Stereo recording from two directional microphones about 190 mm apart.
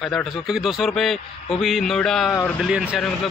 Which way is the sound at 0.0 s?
Centre (ahead or behind).